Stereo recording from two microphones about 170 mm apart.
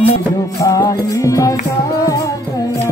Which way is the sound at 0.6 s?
20° left (ahead or behind).